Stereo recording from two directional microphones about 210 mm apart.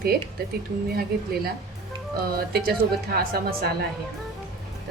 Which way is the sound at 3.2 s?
45° right (ahead or behind).